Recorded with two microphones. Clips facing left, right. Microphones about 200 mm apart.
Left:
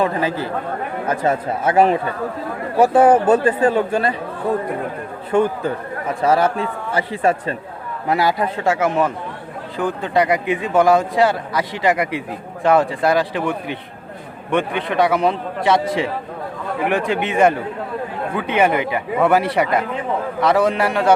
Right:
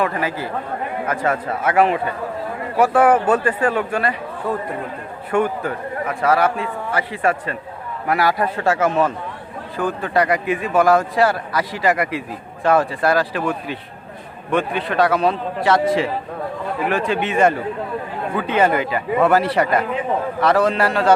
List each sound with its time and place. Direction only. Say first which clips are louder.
0.0 s a man's voice: left 2 dB; 25° left (ahead or behind)
1.7 s a man's voice: left 2 dB; 35° left (ahead or behind)
2.7 s a man's voice: left 2 dB; 25° left (ahead or behind)
5.3 s a man's voice: left 2 dB; 25° left (ahead or behind)